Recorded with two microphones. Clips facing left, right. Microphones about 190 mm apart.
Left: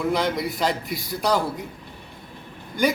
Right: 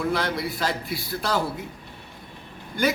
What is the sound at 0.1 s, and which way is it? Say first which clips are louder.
A man's voice: left 3 dB; 15° left (ahead or behind).